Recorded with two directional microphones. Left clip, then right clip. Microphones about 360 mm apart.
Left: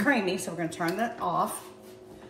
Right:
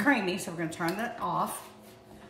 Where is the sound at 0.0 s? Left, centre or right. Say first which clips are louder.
Left 1 dB; centre.